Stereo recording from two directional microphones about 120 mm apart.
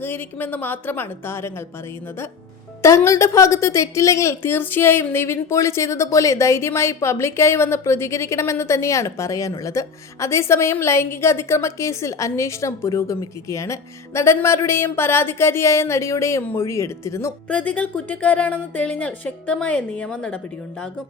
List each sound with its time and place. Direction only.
0.0 s a woman's voice: 15° left (ahead or behind)
2.8 s a woman's voice: 25° left (ahead or behind)
17.5 s a woman's voice: 10° left (ahead or behind)